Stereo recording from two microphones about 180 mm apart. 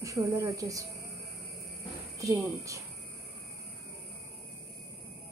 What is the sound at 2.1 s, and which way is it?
Speech, 20° right (ahead or behind).